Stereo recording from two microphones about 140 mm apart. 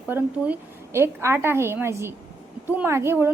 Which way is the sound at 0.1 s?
15° right (ahead or behind).